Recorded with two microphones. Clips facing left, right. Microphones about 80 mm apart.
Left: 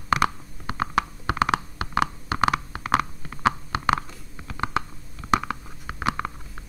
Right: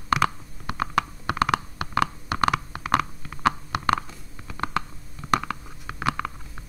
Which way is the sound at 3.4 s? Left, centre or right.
Centre.